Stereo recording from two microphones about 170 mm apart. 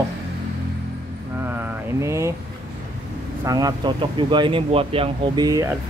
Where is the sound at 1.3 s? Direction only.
10° right (ahead or behind).